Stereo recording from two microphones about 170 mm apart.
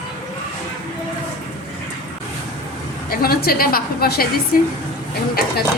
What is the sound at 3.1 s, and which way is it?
A woman's voice, 60° left (ahead or behind).